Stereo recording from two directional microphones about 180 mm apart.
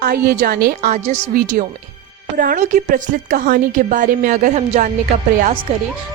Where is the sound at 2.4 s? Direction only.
45° right (ahead or behind).